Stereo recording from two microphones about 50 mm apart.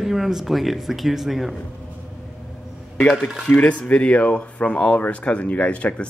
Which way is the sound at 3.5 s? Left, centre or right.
Left.